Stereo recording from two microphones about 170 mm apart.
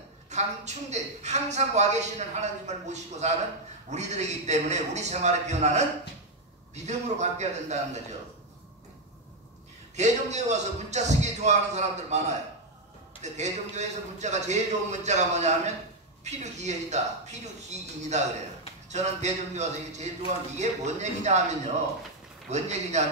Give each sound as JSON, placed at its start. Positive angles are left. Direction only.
{"t": 0.3, "sound": "a man's voice", "side_deg": -40}
{"t": 9.9, "sound": "a man's voice", "side_deg": -40}
{"t": 22.5, "sound": "a man's voice", "side_deg": -40}